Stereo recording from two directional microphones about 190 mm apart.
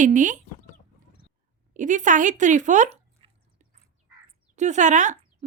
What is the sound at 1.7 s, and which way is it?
Speech, 40° right (ahead or behind).